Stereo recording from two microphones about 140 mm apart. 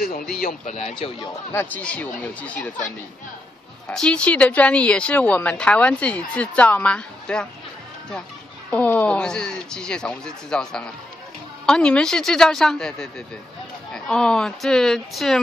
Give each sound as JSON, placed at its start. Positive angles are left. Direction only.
{"t": 0.4, "sound": "speech", "side_deg": 75}
{"t": 1.5, "sound": "speech", "side_deg": 15}
{"t": 3.8, "sound": "speech", "side_deg": 5}
{"t": 8.6, "sound": "speech", "side_deg": 10}